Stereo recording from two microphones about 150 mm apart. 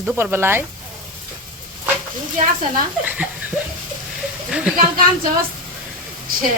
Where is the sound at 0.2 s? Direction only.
15° right (ahead or behind).